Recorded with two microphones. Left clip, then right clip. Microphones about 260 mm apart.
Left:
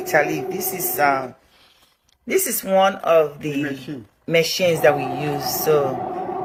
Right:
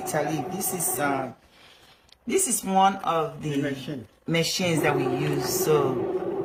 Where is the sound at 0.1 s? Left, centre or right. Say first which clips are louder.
Left 10 dB; left.